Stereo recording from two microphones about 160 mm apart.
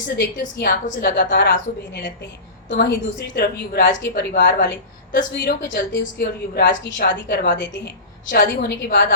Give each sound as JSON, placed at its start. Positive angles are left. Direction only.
{"t": 0.2, "sound": "a woman's voice", "side_deg": 70}